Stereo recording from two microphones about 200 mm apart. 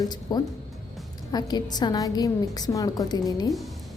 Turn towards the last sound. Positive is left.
turn(degrees=20)  # may be behind; listen again after turning